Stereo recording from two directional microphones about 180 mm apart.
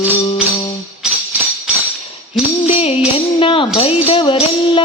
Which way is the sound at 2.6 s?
35° left (ahead or behind).